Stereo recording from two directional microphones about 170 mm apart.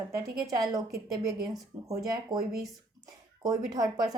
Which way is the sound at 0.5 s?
20° right (ahead or behind).